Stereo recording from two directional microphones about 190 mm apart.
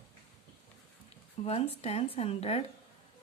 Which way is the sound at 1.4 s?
30° left (ahead or behind).